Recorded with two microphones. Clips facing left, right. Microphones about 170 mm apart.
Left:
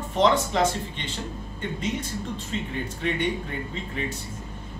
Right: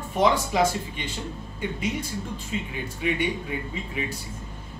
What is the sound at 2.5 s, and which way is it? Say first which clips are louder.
Speech: even; 10° right (ahead or behind).